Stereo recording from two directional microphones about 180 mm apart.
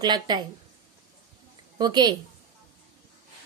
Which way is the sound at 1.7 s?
25° right (ahead or behind).